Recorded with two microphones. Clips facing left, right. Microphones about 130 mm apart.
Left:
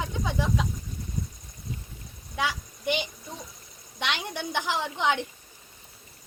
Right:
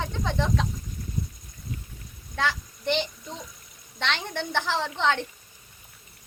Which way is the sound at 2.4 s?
10° left (ahead or behind).